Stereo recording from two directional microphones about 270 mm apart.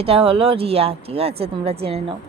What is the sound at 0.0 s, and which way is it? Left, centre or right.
Speech, right.